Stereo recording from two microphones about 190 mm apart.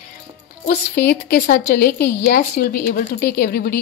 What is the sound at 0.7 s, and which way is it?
A woman's voice, 55° left (ahead or behind).